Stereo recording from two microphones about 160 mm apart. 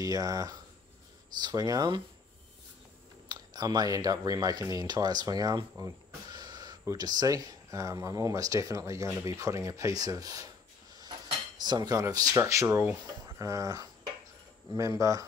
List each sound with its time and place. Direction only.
0.0 s speech: 20° right (ahead or behind)
3.3 s speech: 25° right (ahead or behind)
11.5 s speech: 25° right (ahead or behind)